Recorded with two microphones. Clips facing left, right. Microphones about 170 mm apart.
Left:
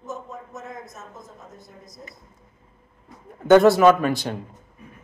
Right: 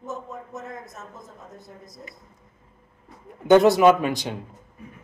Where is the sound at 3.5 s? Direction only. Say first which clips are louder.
Left 1 dB; 15° right (ahead or behind).